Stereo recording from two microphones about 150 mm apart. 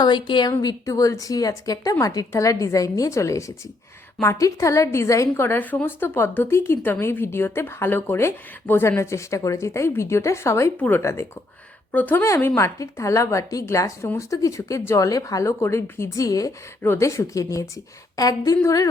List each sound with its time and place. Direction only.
0.0 s a woman's voice: 30° left (ahead or behind)